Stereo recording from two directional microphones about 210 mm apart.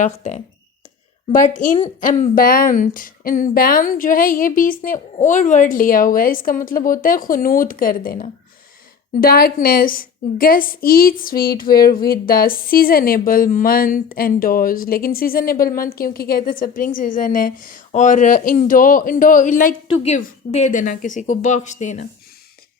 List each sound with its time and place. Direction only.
0.0 s a woman's voice: 35° left (ahead or behind)